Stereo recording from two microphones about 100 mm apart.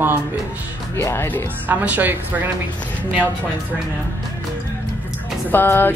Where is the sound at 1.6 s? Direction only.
15° right (ahead or behind).